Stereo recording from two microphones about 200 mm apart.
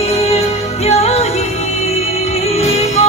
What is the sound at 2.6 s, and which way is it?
Music, 30° left (ahead or behind).